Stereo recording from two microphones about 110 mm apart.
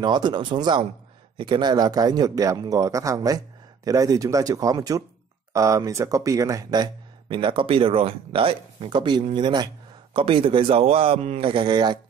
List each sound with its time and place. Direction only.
0.0 s speech: 45° right (ahead or behind)
10.1 s speech: 55° right (ahead or behind)